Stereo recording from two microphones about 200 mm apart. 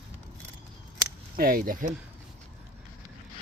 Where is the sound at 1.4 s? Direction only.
45° right (ahead or behind).